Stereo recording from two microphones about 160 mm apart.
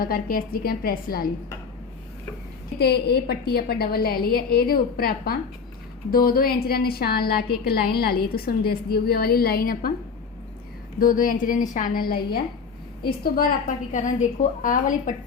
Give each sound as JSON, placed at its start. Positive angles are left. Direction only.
{"t": 0.0, "sound": "a woman's voice", "side_deg": 65}
{"t": 2.7, "sound": "a woman's voice", "side_deg": 90}
{"t": 11.0, "sound": "a woman's voice", "side_deg": 60}